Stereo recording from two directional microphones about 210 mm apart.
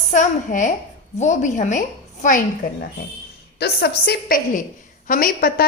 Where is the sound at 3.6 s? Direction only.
50° left (ahead or behind).